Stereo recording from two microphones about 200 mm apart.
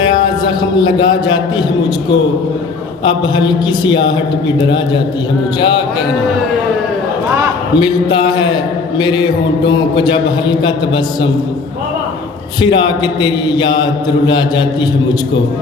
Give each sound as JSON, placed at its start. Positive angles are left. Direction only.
{"t": 0.6, "sound": "a man's voice", "side_deg": 20}
{"t": 3.0, "sound": "a man's voice", "side_deg": 20}
{"t": 7.8, "sound": "a man's voice", "side_deg": 20}
{"t": 12.6, "sound": "a man's voice", "side_deg": 20}